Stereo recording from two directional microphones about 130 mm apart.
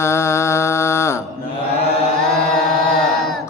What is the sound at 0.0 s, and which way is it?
Mantra, 20° left (ahead or behind).